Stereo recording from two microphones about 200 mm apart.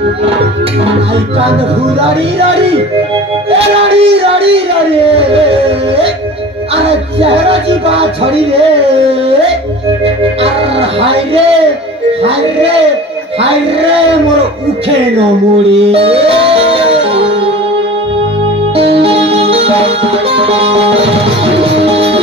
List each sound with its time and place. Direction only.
2.0 s speech: 30° right (ahead or behind)
6.9 s music: 30° right (ahead or behind)
10.0 s music: 30° right (ahead or behind)
12.2 s speech: 30° right (ahead or behind)
15.7 s music: 30° right (ahead or behind)
18.8 s music: 30° right (ahead or behind)